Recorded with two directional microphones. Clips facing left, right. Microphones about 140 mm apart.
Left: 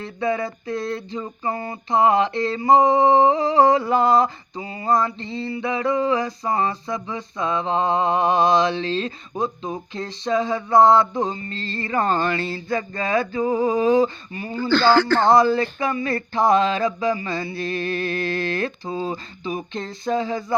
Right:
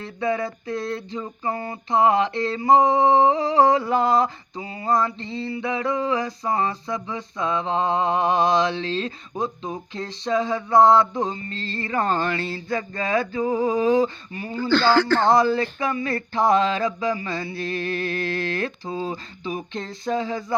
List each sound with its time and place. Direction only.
0.0 s mantra: 25° left (ahead or behind)
3.6 s a sound: 20° left (ahead or behind)
4.0 s mantra: 30° left (ahead or behind)
15.3 s speech: 45° left (ahead or behind)
15.9 s mantra: 35° left (ahead or behind)